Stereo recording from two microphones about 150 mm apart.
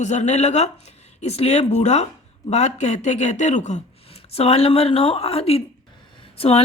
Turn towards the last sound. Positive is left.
turn(degrees=40)  # may be behind; listen again after turning